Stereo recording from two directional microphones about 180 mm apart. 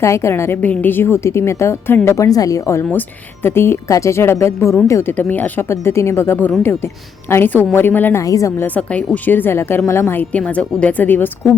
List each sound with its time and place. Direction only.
0.0 s a woman's voice: 15° left (ahead or behind)